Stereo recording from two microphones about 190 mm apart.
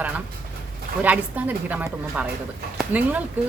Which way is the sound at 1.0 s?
10° right (ahead or behind).